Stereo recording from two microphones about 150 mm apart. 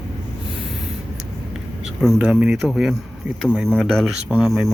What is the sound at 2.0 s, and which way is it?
Speech, 5° right (ahead or behind).